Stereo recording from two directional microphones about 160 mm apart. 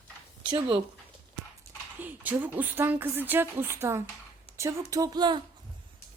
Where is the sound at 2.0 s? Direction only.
10° right (ahead or behind).